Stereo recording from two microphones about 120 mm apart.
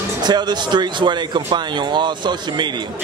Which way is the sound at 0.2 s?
35° right (ahead or behind).